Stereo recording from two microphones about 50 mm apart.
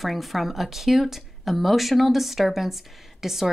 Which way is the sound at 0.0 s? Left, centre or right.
Centre.